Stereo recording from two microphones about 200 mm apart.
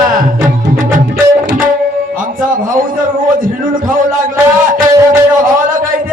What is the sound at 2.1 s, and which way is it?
A man's voice, 45° right (ahead or behind).